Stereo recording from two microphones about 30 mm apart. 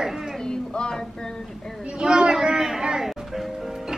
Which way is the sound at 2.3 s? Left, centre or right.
Right.